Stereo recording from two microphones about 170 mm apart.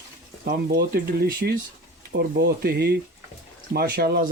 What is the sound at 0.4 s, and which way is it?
Speech, 70° right (ahead or behind).